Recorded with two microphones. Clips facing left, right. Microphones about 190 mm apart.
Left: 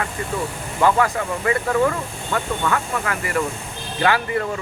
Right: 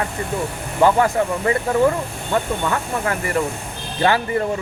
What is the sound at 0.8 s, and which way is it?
Speech, 25° right (ahead or behind).